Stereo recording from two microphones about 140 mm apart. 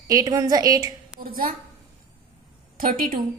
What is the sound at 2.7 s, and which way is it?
Speech, 90° right.